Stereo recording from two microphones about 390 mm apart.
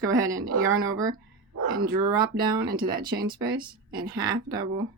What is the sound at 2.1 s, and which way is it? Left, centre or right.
Speech, right.